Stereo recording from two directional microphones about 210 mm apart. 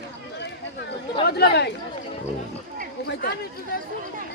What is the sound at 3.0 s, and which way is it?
Chatter, 50° left (ahead or behind).